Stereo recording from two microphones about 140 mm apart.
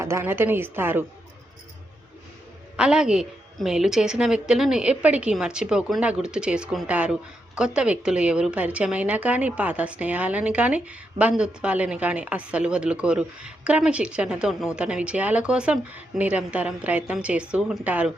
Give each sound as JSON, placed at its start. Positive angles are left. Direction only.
{"t": 0.0, "sound": "a woman's voice", "side_deg": -20}
{"t": 2.7, "sound": "a woman's voice", "side_deg": -5}